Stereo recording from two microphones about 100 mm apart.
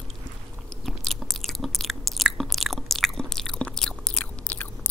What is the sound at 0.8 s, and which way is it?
Chewing, 5° left (ahead or behind).